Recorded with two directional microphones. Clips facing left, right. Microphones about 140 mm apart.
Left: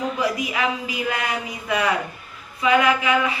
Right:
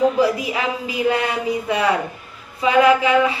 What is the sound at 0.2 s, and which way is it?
A woman's voice, 30° right (ahead or behind).